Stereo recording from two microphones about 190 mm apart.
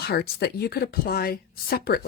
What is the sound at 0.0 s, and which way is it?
A woman's voice, 55° left (ahead or behind).